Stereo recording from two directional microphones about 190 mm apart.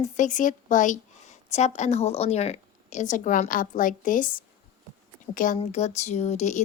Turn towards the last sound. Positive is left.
turn(degrees=35)  # may be behind; listen again after turning